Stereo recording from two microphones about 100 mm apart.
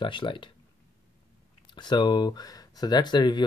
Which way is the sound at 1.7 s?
50° left (ahead or behind).